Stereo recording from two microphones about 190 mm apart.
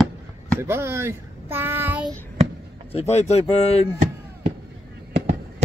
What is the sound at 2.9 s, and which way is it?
Speech, 35° left (ahead or behind).